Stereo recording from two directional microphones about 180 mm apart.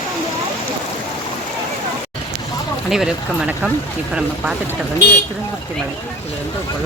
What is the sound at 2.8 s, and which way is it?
Speech, centre (ahead or behind).